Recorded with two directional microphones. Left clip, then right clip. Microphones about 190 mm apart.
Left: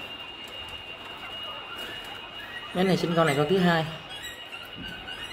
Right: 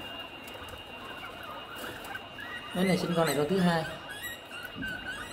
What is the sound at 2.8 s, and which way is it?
Speech, 35° left (ahead or behind).